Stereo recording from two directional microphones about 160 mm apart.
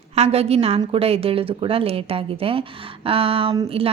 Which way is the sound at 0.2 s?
40° right (ahead or behind).